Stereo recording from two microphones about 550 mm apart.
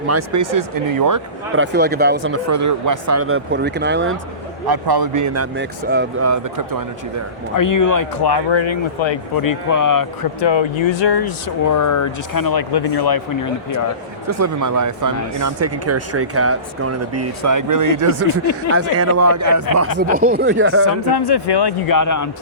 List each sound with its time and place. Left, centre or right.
0.1 s speech: right
1.5 s speech: centre
4.6 s speech: right; by 6.3 s centre
6.3 s speech: right
7.5 s speech: left
9.3 s speech: left
10.4 s speech: left
14.3 s speech: right
20.1 s speech: centre
21.1 s speech: left